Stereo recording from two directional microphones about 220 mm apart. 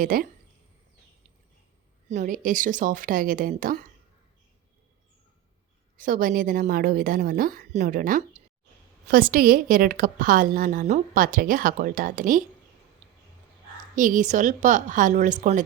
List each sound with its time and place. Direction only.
0.0 s a woman's voice: 40° right (ahead or behind)
2.0 s a woman's voice: 35° right (ahead or behind)
6.0 s a woman's voice: 40° right (ahead or behind)
13.9 s a woman's voice: 35° right (ahead or behind)